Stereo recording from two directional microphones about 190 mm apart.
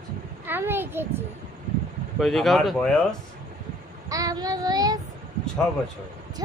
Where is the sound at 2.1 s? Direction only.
Centre (ahead or behind).